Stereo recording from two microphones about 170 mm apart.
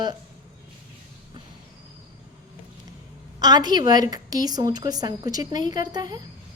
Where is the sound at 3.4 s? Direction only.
25° right (ahead or behind).